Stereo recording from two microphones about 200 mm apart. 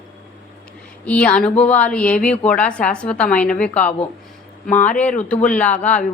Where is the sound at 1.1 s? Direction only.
5° left (ahead or behind).